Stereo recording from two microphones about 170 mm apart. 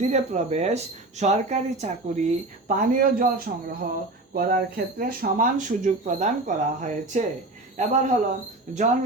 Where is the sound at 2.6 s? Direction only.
50° right (ahead or behind).